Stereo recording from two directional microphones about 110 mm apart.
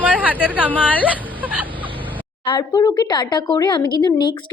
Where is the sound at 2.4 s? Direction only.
40° left (ahead or behind).